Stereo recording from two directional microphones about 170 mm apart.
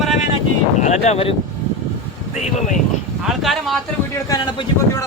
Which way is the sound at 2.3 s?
40° left (ahead or behind).